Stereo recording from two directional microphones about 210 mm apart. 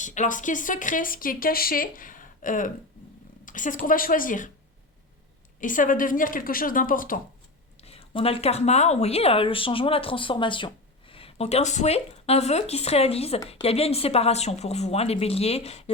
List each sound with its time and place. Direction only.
0.0 s speech: 35° left (ahead or behind)
3.4 s a sound: 40° left (ahead or behind)
3.8 s speech: 40° left (ahead or behind)
5.5 s speech: 40° left (ahead or behind)
7.8 s speech: 30° left (ahead or behind)